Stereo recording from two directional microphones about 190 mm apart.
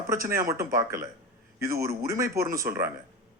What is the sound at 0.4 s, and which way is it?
Speech, 15° right (ahead or behind).